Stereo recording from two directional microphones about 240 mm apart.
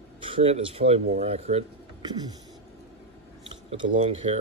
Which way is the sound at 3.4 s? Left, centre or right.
Right.